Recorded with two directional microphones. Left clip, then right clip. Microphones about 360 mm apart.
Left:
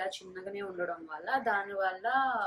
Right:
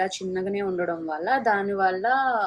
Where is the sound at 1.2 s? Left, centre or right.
Centre.